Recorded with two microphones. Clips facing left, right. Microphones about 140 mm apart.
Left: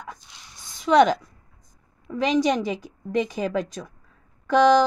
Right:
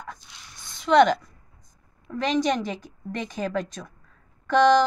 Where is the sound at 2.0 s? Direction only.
5° left (ahead or behind).